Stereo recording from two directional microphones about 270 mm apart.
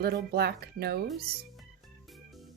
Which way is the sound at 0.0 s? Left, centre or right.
Right.